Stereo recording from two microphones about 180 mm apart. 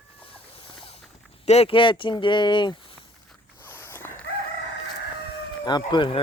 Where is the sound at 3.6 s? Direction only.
10° left (ahead or behind).